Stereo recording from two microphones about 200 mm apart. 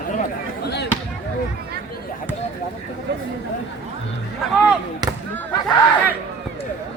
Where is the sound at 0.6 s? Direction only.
55° left (ahead or behind).